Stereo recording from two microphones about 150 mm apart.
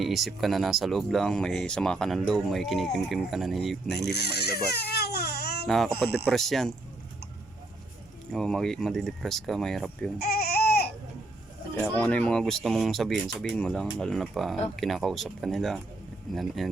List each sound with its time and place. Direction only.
0.0 s speech: centre (ahead or behind)
4.0 s speech: 90° left
5.6 s speech: centre (ahead or behind)
8.3 s speech: 5° left (ahead or behind)
10.2 s baby cry: 90° left
11.8 s speech: 10° left (ahead or behind)